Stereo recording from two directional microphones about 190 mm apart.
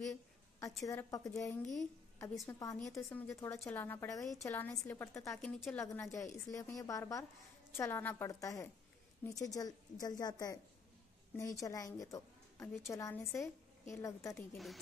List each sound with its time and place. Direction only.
0.1 s a sound: 15° left (ahead or behind)
0.8 s a woman's voice: 15° left (ahead or behind)
5.4 s a woman's voice: 5° left (ahead or behind)
14.3 s a woman's voice: centre (ahead or behind)